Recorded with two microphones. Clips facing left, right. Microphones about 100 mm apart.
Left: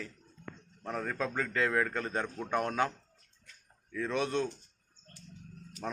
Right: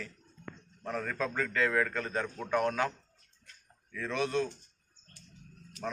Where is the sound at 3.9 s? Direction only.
15° left (ahead or behind).